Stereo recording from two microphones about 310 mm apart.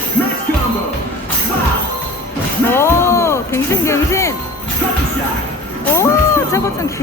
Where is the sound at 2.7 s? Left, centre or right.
Centre.